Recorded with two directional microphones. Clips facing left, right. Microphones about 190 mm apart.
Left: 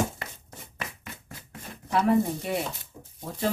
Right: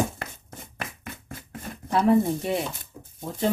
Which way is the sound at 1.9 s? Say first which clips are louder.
Right 3 dB; 25° right (ahead or behind).